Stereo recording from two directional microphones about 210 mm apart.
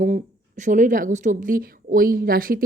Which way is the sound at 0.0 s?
35° right (ahead or behind).